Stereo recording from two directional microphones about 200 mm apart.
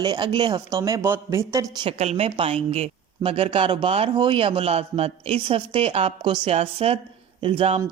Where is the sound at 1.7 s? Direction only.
25° right (ahead or behind).